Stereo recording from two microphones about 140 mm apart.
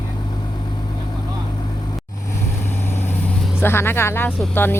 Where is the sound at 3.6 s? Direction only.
15° left (ahead or behind).